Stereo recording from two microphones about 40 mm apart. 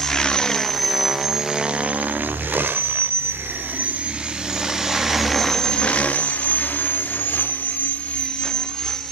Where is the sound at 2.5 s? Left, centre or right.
Right.